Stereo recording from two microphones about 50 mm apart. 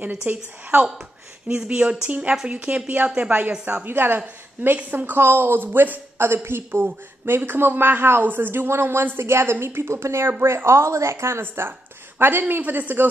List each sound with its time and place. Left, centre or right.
0.3 s speech: right
1.5 s a woman's voice: right
4.6 s speech: right
4.9 s speech: right
6.1 s speech: right